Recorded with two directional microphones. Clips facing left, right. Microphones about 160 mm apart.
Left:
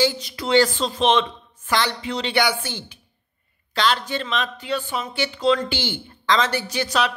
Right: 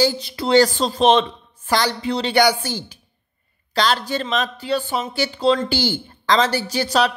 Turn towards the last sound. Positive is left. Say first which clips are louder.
# right 4 dB
turn(degrees=-35)  # may be behind; listen again after turning